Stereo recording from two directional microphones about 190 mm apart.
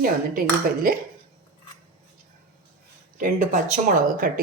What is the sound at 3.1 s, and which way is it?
Speech, 45° right (ahead or behind).